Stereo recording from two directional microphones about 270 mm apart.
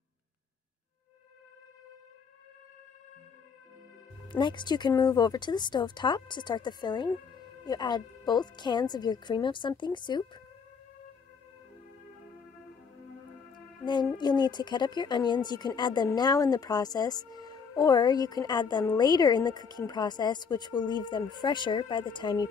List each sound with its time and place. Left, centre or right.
4.3 s speech: centre
13.8 s speech: centre